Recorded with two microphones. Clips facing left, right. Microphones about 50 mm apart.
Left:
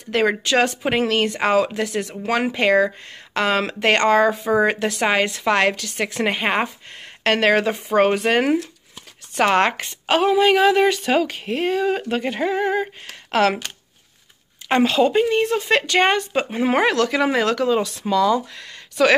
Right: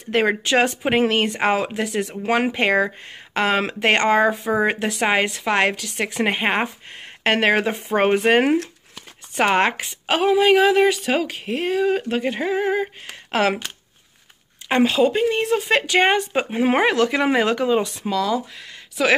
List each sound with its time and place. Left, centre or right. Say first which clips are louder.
0.2 s speech: left 1 dB; centre
4.5 s speech: left 2 dB; centre
14.7 s speech: left 1 dB; centre
18.0 s speech: left 4 dB; centre